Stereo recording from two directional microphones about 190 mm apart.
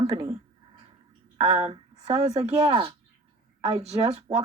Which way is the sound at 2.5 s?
25° right (ahead or behind).